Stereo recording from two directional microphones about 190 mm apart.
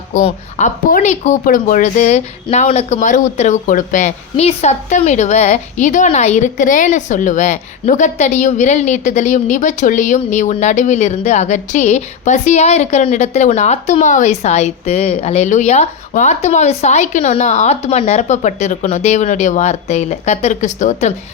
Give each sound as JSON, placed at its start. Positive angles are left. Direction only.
{"t": 0.1, "sound": "speech", "side_deg": 40}